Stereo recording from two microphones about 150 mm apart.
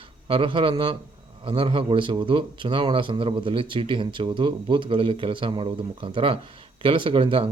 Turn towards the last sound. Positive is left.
turn(degrees=-35)  # may be behind; listen again after turning